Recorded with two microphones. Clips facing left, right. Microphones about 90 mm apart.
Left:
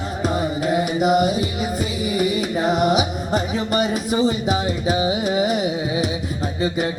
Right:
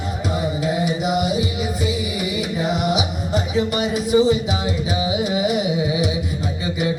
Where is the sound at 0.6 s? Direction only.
50° left (ahead or behind).